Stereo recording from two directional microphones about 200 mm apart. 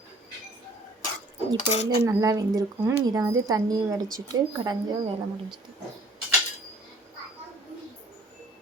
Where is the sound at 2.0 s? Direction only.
15° right (ahead or behind).